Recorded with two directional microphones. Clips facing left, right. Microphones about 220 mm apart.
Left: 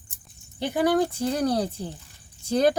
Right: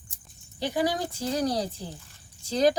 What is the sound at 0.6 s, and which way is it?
Speech, 55° left (ahead or behind).